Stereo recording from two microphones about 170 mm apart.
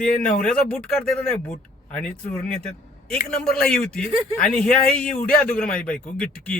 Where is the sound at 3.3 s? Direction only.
5° left (ahead or behind).